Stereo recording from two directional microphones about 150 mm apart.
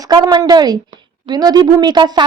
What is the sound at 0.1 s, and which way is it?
A woman's voice, 25° right (ahead or behind).